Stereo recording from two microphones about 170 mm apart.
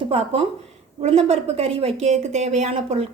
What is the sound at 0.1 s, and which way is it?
A woman's voice, 35° right (ahead or behind).